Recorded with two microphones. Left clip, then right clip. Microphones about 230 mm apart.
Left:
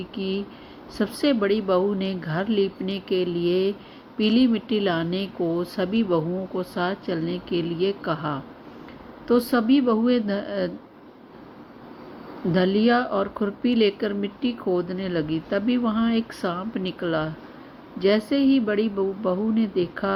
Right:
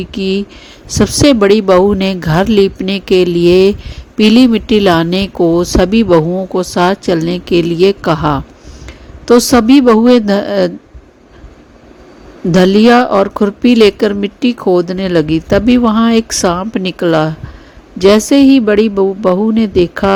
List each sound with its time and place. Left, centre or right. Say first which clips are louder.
0.0 s speech: right 13 dB; right
12.5 s speech: right 13 dB; right